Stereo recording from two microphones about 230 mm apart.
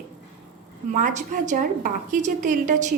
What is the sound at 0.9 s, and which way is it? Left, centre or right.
A woman's voice, right.